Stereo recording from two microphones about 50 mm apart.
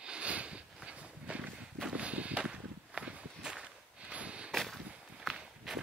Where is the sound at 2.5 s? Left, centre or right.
Centre.